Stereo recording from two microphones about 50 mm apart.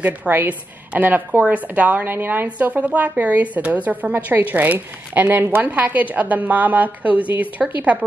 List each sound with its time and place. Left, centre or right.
0.3 s a woman's voice: right
2.4 s a woman's voice: right